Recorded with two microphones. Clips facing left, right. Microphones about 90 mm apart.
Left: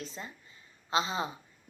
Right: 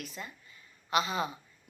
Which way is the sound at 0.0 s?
25° left (ahead or behind).